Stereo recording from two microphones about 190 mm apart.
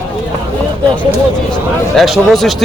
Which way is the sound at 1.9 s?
Centre (ahead or behind).